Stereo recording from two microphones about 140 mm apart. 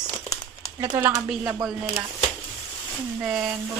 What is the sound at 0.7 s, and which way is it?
Speech, 20° right (ahead or behind).